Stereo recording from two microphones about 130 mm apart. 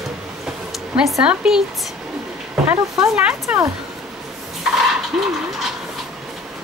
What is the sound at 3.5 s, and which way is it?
Speech, 10° right (ahead or behind).